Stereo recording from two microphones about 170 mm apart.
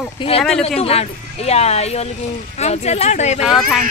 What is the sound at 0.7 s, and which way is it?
Speech, 35° left (ahead or behind).